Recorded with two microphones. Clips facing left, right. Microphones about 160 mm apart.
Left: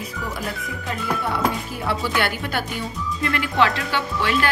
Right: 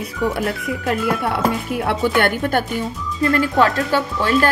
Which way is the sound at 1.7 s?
65° right (ahead or behind).